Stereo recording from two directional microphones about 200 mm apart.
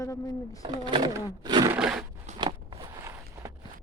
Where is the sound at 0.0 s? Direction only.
15° left (ahead or behind).